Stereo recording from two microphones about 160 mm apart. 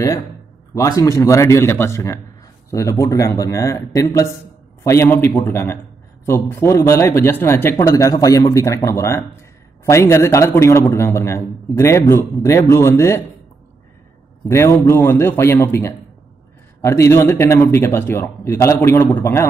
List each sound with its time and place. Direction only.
0.7 s a man's voice: 20° left (ahead or behind)
14.5 s a man's voice: 15° left (ahead or behind)